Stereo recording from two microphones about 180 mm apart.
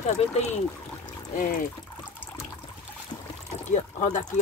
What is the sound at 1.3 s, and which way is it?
Speech, 50° left (ahead or behind).